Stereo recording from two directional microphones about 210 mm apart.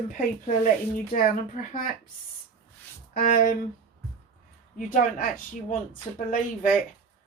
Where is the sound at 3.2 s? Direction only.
40° left (ahead or behind).